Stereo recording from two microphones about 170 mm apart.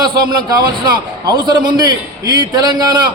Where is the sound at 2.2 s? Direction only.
20° right (ahead or behind).